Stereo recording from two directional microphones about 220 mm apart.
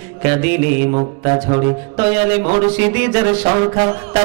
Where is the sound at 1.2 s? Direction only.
25° right (ahead or behind).